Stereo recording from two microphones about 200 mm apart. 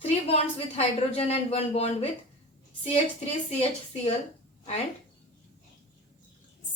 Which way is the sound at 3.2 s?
30° left (ahead or behind).